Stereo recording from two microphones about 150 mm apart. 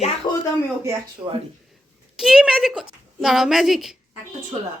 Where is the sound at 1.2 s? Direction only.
25° right (ahead or behind).